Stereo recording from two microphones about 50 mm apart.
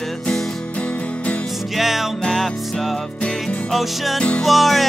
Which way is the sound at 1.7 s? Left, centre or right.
Centre.